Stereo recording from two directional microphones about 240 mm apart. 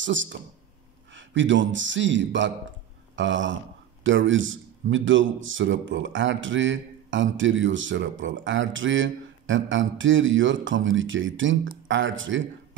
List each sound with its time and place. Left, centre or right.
0.0 s a man's voice: right